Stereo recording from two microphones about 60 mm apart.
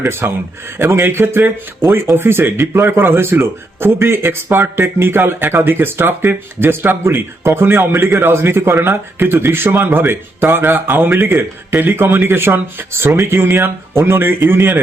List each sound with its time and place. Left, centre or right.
0.0 s speech: right